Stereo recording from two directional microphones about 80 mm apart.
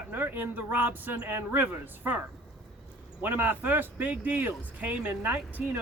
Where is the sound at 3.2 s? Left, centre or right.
Right.